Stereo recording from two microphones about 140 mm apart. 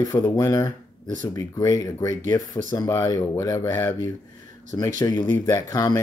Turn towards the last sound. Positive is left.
turn(degrees=25)  # may be behind; listen again after turning